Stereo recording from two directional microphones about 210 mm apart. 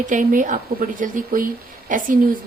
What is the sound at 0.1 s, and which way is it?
A woman's voice, 40° right (ahead or behind).